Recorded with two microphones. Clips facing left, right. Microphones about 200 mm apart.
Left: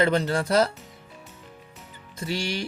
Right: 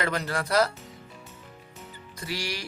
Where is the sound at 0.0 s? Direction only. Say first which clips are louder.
Left 7 dB; 25° left (ahead or behind).